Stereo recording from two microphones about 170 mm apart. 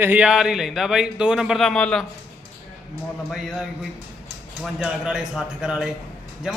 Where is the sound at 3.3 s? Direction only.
Centre (ahead or behind).